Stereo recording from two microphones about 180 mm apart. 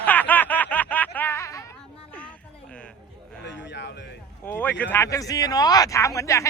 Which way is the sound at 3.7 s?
70° left (ahead or behind).